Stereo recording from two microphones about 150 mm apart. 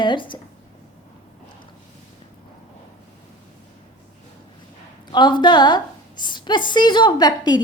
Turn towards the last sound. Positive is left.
turn(degrees=25)  # may be behind; listen again after turning